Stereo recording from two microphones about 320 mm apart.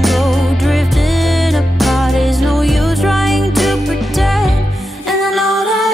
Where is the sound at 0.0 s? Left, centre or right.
Centre.